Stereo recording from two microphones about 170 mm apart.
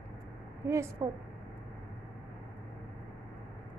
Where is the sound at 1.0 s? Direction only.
20° right (ahead or behind).